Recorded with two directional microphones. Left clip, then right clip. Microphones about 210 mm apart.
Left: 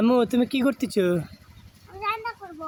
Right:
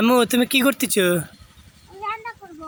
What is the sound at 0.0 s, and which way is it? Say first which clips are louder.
Speech: right 4 dB; centre (ahead or behind).